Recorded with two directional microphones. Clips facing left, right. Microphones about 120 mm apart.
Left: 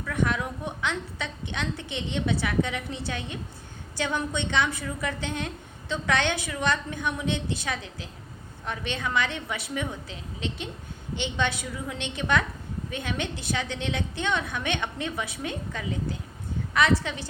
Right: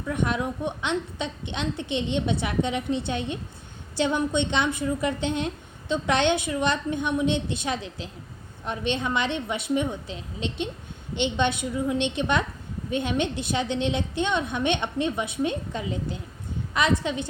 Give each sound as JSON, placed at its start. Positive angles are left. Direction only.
{"t": 0.0, "sound": "a woman's voice", "side_deg": -25}